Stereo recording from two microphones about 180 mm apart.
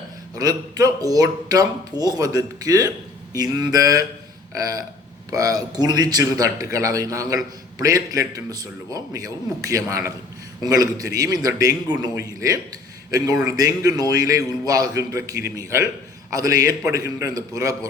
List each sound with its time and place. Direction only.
0.3 s speech: 20° right (ahead or behind)